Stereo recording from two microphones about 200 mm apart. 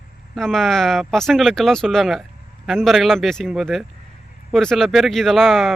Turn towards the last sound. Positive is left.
turn(degrees=0)  # may be behind; listen again after turning